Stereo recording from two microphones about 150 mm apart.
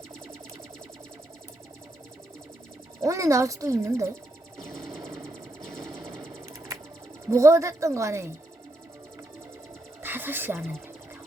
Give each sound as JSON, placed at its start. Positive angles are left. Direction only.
{"t": 3.0, "sound": "speech", "side_deg": -20}
{"t": 4.5, "sound": "music", "side_deg": -20}
{"t": 5.8, "sound": "sewing machine", "side_deg": -20}
{"t": 7.3, "sound": "speech", "side_deg": -20}
{"t": 10.0, "sound": "speech", "side_deg": -15}